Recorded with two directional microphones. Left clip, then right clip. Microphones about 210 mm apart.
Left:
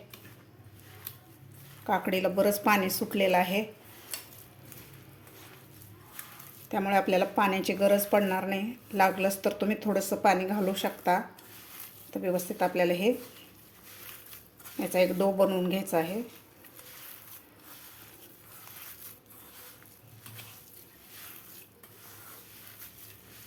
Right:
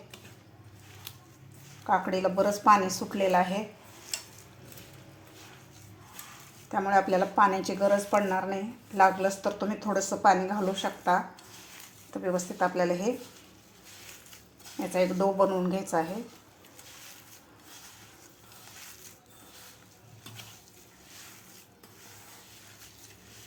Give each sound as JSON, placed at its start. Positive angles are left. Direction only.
{"t": 1.9, "sound": "a woman's voice", "side_deg": 20}
{"t": 6.7, "sound": "a woman's voice", "side_deg": 20}
{"t": 14.8, "sound": "a woman's voice", "side_deg": 15}